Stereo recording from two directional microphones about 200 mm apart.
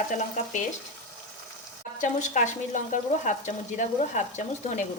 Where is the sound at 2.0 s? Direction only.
40° left (ahead or behind).